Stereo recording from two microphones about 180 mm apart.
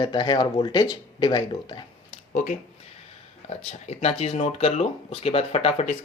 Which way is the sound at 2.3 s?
45° left (ahead or behind).